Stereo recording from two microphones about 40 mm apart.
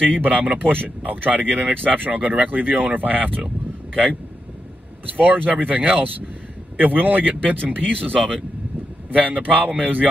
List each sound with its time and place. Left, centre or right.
0.0 s speech: right
0.7 s speech: right
5.0 s a man's voice: right
9.1 s a man's voice: right